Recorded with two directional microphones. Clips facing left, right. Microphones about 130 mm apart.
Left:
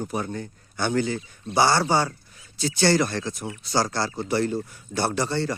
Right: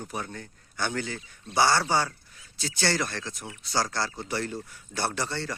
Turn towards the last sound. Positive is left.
turn(degrees=20)  # may be behind; listen again after turning